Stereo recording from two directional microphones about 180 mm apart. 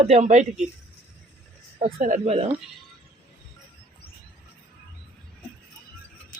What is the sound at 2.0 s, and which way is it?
Speech, 40° right (ahead or behind).